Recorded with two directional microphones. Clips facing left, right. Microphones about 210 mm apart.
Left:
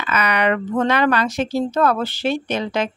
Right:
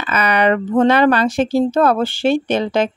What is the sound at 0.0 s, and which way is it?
Speech, 30° right (ahead or behind).